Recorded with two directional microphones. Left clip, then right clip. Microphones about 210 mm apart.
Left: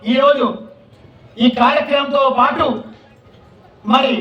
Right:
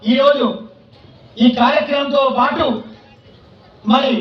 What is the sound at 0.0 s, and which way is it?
A man's voice, 30° right (ahead or behind).